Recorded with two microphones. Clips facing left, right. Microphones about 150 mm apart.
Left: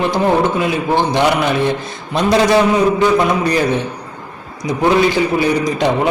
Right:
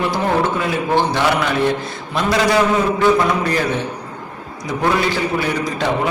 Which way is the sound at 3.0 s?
20° left (ahead or behind).